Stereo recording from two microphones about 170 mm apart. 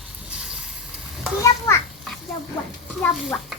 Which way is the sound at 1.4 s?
15° left (ahead or behind).